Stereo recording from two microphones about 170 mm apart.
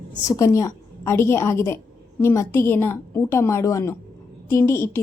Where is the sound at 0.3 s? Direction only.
20° left (ahead or behind).